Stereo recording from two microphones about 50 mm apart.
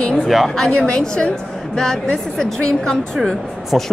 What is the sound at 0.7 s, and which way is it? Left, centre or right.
A woman's voice, centre.